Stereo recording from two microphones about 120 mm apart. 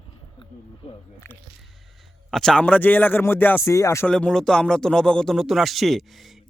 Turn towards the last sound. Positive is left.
turn(degrees=0)  # may be behind; listen again after turning